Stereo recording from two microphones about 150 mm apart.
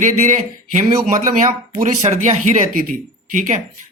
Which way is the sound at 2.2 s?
50° right (ahead or behind).